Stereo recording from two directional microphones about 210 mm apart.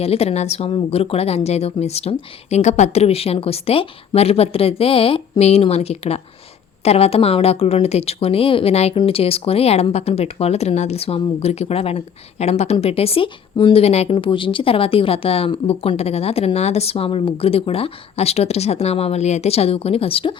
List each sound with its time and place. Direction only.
0.0 s a woman's voice: 30° left (ahead or behind)